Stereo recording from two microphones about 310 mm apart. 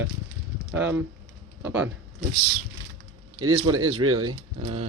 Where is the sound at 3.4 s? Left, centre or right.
Right.